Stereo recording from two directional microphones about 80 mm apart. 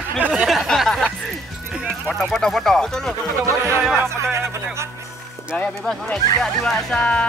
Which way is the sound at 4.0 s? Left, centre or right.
Right.